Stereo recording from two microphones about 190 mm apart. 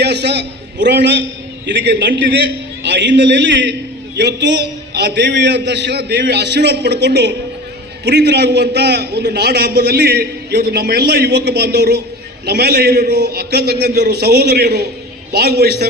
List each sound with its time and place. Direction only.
0.0 s a man's voice: 60° right (ahead or behind)